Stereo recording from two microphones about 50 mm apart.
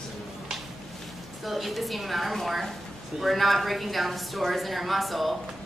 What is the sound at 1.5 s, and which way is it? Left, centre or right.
A woman's voice, centre.